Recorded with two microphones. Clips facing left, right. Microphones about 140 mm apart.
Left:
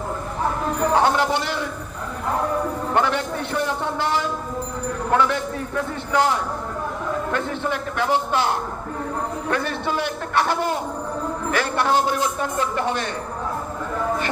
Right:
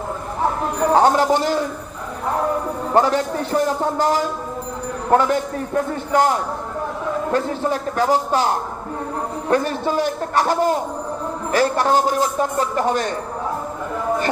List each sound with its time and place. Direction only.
0.9 s speech: 40° right (ahead or behind)
2.9 s a man's voice: 35° right (ahead or behind)